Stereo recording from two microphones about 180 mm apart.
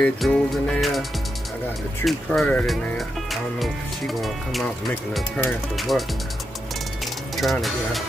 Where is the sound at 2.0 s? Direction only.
5° left (ahead or behind).